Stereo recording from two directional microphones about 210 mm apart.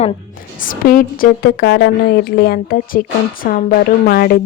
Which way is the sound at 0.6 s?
40° left (ahead or behind).